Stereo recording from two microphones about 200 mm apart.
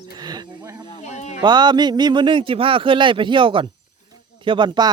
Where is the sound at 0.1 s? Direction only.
20° right (ahead or behind).